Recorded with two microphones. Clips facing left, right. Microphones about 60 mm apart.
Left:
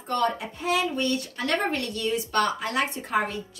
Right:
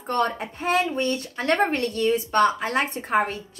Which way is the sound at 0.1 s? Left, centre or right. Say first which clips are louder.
Right 1 dB; right.